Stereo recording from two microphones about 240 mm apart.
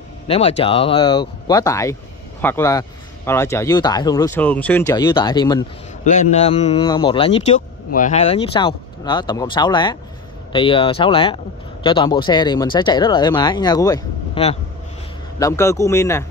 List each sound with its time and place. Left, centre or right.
0.3 s speech: left
15.3 s speech: centre